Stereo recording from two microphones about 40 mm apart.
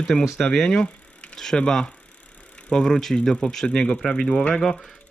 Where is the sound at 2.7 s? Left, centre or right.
Centre.